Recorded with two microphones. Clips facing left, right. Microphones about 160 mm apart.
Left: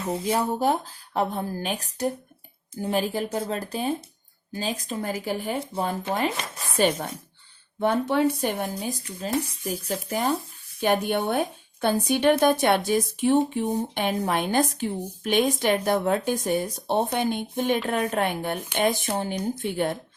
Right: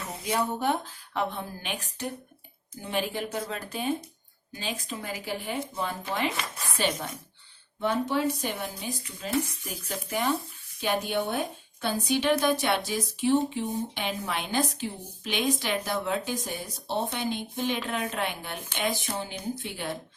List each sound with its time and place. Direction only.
0.1 s a woman's voice: 30° left (ahead or behind)
7.8 s a woman's voice: 55° left (ahead or behind); by 10.3 s 40° left (ahead or behind)
10.8 s a woman's voice: 55° left (ahead or behind)